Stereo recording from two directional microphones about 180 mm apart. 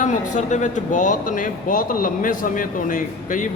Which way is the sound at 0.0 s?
40° left (ahead or behind).